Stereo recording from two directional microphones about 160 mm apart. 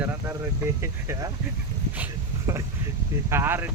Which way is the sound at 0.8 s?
15° right (ahead or behind).